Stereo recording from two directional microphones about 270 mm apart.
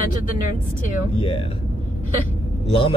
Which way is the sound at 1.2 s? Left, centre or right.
Centre.